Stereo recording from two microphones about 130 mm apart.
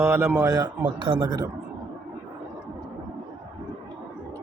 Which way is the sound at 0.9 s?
40° right (ahead or behind).